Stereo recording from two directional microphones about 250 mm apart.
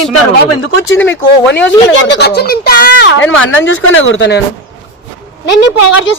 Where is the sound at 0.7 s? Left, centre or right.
Left.